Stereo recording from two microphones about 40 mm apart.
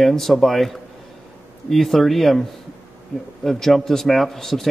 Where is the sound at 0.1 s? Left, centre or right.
Centre.